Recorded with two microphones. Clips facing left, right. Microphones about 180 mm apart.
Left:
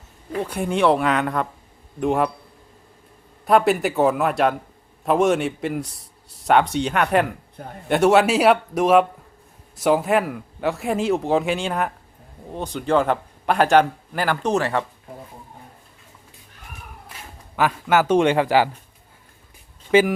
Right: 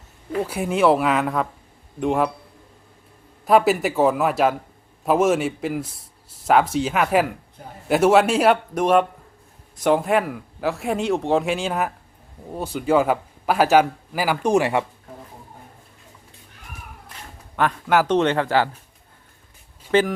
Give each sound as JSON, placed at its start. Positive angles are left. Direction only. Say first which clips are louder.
{"t": 0.3, "sound": "a man's voice", "louder": "right 1 dB", "side_deg": -5}
{"t": 3.4, "sound": "a man's voice", "louder": "even", "side_deg": 0}
{"t": 17.6, "sound": "a man's voice", "louder": "even", "side_deg": 5}
{"t": 19.9, "sound": "a man's voice", "louder": "left 2 dB", "side_deg": 10}